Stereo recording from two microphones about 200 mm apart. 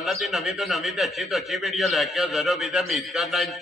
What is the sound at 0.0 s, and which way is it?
A man's voice, centre (ahead or behind).